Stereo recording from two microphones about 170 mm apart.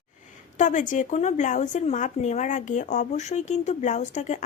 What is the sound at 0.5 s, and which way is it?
A woman's voice, 45° left (ahead or behind).